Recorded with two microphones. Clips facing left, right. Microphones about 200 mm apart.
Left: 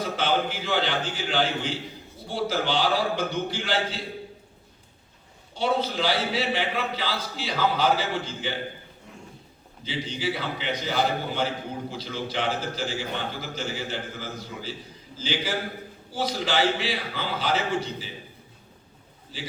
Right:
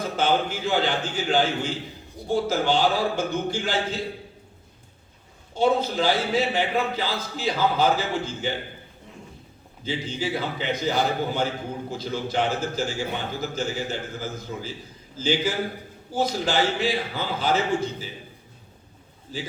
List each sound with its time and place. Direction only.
0.0 s a man's voice: 45° right (ahead or behind)
5.5 s a man's voice: 45° right (ahead or behind)
9.8 s a man's voice: 45° right (ahead or behind)